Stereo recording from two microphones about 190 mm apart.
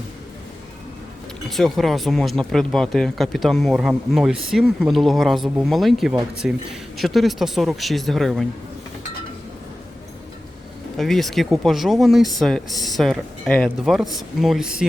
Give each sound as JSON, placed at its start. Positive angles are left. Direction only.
{"t": 1.5, "sound": "speech", "side_deg": 0}
{"t": 10.9, "sound": "speech", "side_deg": 0}